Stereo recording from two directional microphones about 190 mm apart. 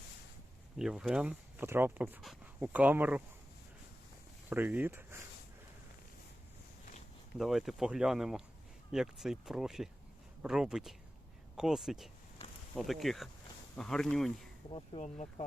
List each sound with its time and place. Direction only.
0.8 s speech: 5° right (ahead or behind)
4.4 s speech: 10° right (ahead or behind)
7.3 s speech: centre (ahead or behind)
14.7 s speech: 25° left (ahead or behind)
15.0 s speech: 40° left (ahead or behind)